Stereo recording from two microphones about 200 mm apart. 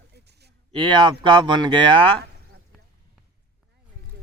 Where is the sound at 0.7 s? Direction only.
25° right (ahead or behind).